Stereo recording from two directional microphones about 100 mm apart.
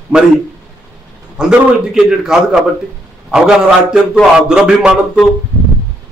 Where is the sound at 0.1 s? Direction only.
10° right (ahead or behind).